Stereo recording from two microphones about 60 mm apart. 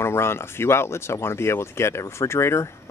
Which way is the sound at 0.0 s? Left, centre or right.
Left.